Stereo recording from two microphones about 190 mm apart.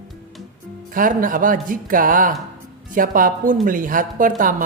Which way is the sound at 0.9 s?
45° right (ahead or behind).